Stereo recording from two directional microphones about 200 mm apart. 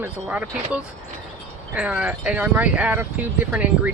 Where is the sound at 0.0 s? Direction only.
5° right (ahead or behind).